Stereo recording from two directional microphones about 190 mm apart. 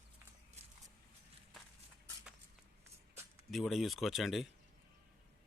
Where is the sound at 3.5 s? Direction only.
Centre (ahead or behind).